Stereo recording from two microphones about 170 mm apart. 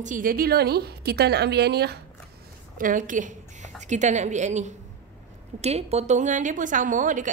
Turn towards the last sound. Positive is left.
turn(degrees=-50)  # may be behind; listen again after turning